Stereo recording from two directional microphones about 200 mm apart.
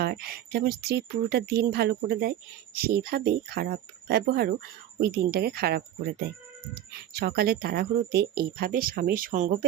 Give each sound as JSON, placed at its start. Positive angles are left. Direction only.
{"t": 0.0, "sound": "speech", "side_deg": -50}